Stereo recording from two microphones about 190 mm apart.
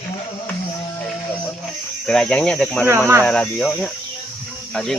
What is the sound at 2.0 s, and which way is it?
Speech, 5° left (ahead or behind).